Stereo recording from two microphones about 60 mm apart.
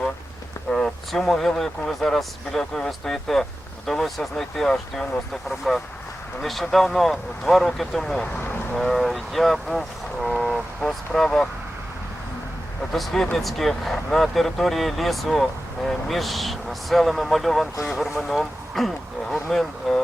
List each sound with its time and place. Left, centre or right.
0.7 s a sound: centre
1.1 s speech: centre
4.7 s speech: centre
5.3 s speech: centre
12.9 s speech: centre